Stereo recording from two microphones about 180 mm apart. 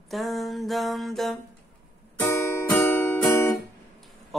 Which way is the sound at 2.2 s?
15° left (ahead or behind).